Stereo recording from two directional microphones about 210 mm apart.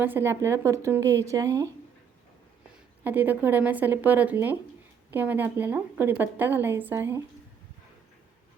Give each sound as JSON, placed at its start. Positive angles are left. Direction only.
{"t": 0.0, "sound": "a woman's voice", "side_deg": -10}
{"t": 3.0, "sound": "a woman's voice", "side_deg": -10}